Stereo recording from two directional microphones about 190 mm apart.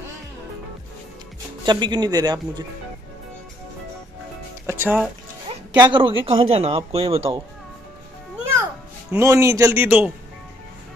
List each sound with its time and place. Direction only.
1.7 s speech: 25° right (ahead or behind)
4.6 s speech: 10° right (ahead or behind)
5.8 s speech: 25° right (ahead or behind)
9.1 s speech: 15° right (ahead or behind)